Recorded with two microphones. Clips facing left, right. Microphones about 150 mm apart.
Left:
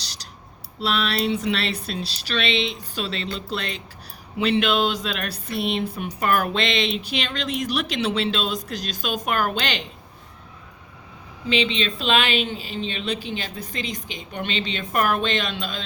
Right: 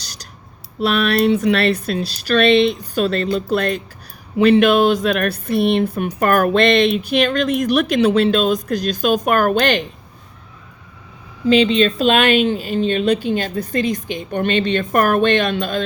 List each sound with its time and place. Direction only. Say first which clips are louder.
0.8 s speech: right 8 dB; 55° right (ahead or behind)
11.4 s speech: right 10 dB; 45° right (ahead or behind)